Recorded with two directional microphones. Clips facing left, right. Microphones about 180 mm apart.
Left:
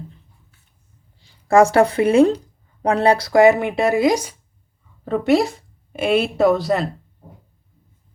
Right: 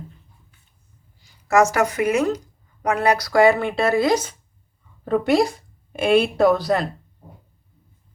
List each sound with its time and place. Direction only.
1.2 s speech: 30° left (ahead or behind); by 4.4 s 15° left (ahead or behind)
5.0 s speech: centre (ahead or behind)